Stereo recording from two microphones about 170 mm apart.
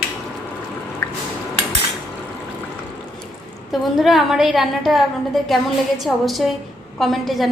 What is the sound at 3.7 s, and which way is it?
A woman's voice, centre (ahead or behind).